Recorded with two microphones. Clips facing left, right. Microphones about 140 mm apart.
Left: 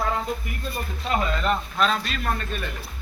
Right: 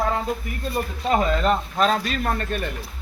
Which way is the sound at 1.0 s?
40° right (ahead or behind).